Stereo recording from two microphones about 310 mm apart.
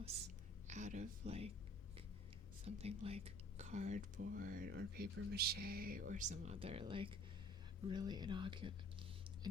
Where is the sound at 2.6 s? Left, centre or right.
Centre.